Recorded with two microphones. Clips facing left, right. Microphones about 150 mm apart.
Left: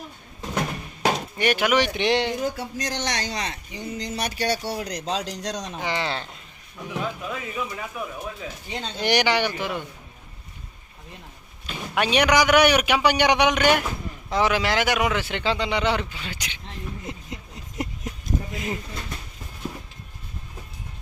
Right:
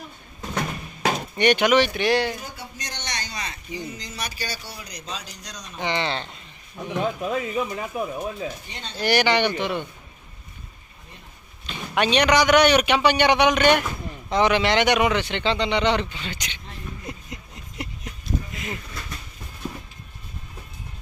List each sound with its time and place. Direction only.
1.0 s speech: 5° left (ahead or behind); by 2.4 s 20° left (ahead or behind)
2.6 s speech: 90° left
5.8 s a man's voice: 5° left (ahead or behind)
6.8 s speech: 30° right (ahead or behind)
9.0 s a man's voice: 15° left (ahead or behind)
11.6 s a man's voice: 5° left (ahead or behind)
17.1 s a sound: 30° left (ahead or behind)
18.6 s speech: 30° left (ahead or behind)